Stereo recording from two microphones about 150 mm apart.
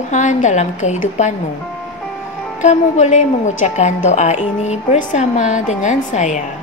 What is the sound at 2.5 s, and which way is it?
A woman's voice, 55° left (ahead or behind).